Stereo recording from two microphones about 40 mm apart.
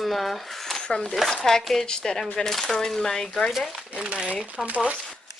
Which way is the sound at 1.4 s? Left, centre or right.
Centre.